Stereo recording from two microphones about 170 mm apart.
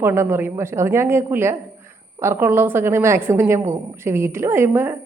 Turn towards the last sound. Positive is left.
turn(degrees=-15)  # may be behind; listen again after turning